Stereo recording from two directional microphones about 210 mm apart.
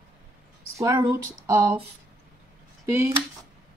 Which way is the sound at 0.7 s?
15° right (ahead or behind).